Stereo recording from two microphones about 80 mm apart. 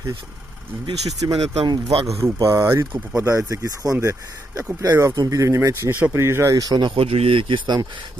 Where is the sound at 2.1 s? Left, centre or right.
Right.